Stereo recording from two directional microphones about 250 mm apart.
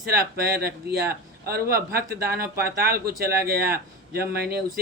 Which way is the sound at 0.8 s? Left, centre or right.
Right.